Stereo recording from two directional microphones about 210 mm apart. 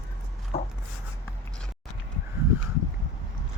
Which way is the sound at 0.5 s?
30° left (ahead or behind).